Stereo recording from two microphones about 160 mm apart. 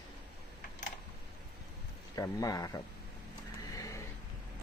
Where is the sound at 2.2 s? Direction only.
20° left (ahead or behind).